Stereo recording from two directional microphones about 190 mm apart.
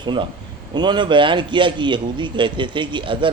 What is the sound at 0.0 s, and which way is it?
Speech, 25° right (ahead or behind).